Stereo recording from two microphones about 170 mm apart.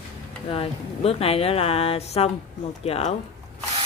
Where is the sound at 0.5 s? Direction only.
35° left (ahead or behind).